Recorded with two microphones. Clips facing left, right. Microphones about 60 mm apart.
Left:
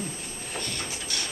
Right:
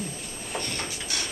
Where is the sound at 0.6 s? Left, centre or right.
Right.